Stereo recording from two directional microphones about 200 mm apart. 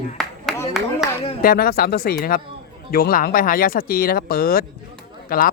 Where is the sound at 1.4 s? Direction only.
50° left (ahead or behind).